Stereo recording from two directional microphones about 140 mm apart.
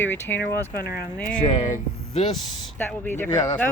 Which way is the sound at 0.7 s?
90° left.